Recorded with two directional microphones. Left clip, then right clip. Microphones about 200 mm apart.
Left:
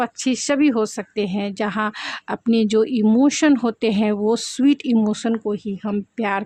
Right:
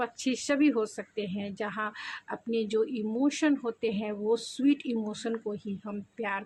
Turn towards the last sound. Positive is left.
turn(degrees=45)  # may be behind; listen again after turning